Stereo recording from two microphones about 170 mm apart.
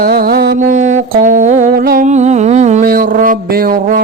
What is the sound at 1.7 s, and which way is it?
Humming, 65° right (ahead or behind).